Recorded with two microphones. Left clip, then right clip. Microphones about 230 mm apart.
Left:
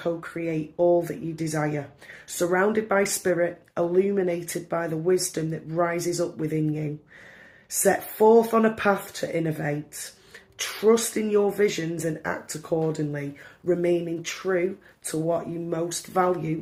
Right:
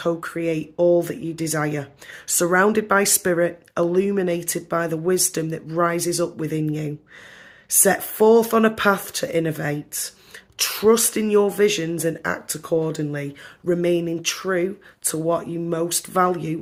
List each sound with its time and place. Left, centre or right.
0.0 s speech: right